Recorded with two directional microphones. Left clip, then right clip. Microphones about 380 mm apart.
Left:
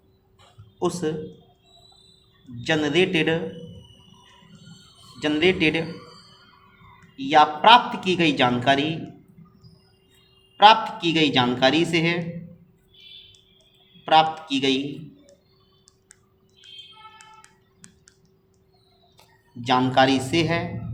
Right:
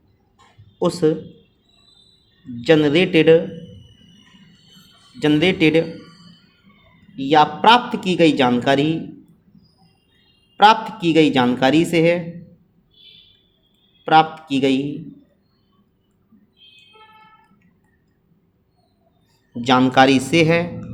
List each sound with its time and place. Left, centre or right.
0.8 s speech: centre
2.6 s speech: centre
5.2 s speech: centre
7.2 s speech: centre
10.6 s speech: centre
14.0 s speech: centre
19.6 s speech: centre